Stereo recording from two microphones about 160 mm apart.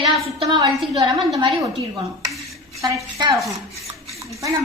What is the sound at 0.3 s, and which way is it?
A woman's voice, 30° right (ahead or behind).